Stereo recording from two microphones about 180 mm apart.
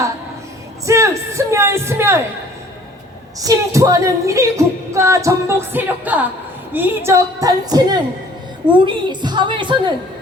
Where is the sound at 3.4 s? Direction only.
15° right (ahead or behind).